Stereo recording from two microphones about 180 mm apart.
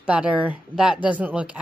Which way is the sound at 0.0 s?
5° right (ahead or behind).